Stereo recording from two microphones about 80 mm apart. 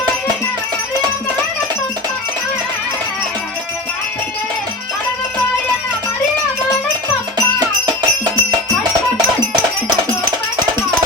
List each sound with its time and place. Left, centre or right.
7.9 s music: right